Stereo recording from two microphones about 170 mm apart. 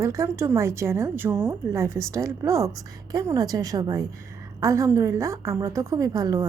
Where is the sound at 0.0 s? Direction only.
15° right (ahead or behind).